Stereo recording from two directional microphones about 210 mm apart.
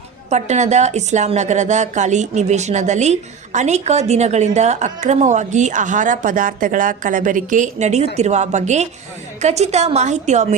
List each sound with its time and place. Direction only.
0.3 s speech: 35° right (ahead or behind)